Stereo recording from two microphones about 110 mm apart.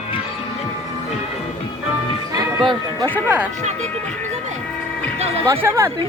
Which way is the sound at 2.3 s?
45° right (ahead or behind).